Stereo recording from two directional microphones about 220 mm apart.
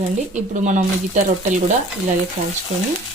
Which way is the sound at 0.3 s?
35° right (ahead or behind).